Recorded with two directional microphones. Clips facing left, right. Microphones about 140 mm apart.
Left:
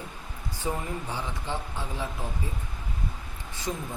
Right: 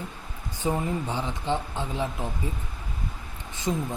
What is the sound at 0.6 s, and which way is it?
Speech, 20° right (ahead or behind).